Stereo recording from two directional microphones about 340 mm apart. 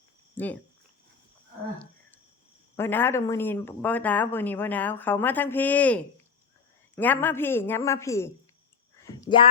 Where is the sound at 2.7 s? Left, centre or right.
Centre.